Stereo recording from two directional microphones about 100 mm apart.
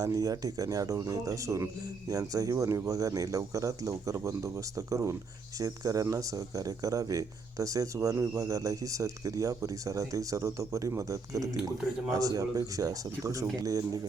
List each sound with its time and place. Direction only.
0.0 s speech: 35° right (ahead or behind)